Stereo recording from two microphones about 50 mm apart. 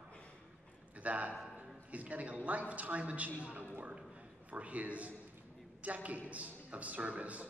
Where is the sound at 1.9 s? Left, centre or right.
Right.